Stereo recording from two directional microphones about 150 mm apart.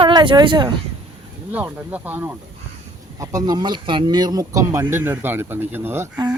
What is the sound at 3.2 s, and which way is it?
Speech, 25° right (ahead or behind).